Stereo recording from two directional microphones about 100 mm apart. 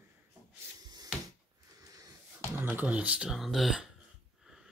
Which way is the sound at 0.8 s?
40° right (ahead or behind).